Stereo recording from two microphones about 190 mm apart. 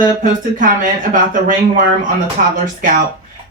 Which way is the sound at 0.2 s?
45° right (ahead or behind).